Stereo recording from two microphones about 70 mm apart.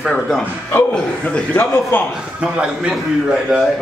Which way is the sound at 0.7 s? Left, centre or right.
Left.